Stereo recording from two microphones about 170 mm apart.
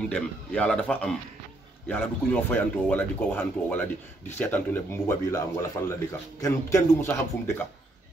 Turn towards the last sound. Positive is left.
turn(degrees=15)  # may be behind; listen again after turning